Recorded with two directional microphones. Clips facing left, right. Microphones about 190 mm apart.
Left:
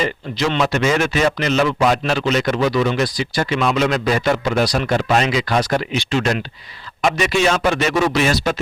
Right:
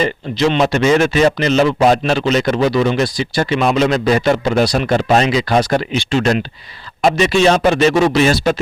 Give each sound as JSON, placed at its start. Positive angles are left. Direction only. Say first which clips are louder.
{"t": 0.0, "sound": "a man's voice", "louder": "right 5 dB", "side_deg": -25}